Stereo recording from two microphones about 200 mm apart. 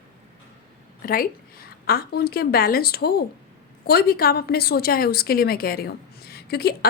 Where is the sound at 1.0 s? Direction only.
45° left (ahead or behind).